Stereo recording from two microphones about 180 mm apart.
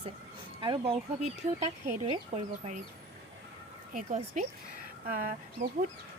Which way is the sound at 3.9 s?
45° right (ahead or behind).